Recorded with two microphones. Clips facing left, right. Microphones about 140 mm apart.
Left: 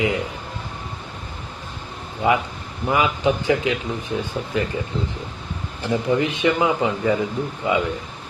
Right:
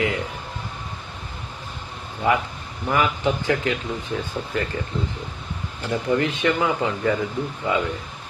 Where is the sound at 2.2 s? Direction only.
15° left (ahead or behind).